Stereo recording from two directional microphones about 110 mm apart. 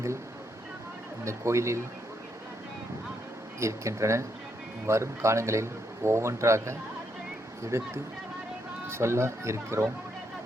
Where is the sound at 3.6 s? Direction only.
25° right (ahead or behind).